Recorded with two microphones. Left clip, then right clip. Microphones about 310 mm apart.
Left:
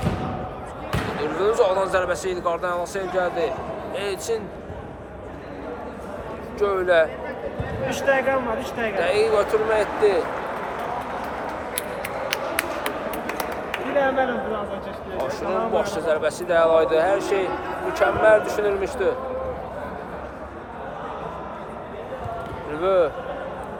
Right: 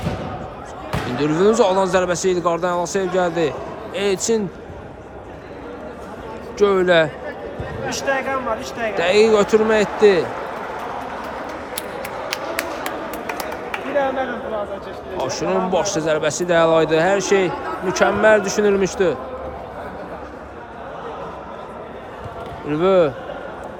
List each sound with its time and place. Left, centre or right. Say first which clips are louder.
1.2 s speech: right 5 dB; right
6.6 s speech: right 4 dB; right
8.0 s speech: left 1 dB; centre
9.0 s speech: right 6 dB; right
12.3 s a sound: right 1 dB; centre
15.3 s speech: right 4 dB; right
22.7 s speech: right 4 dB; right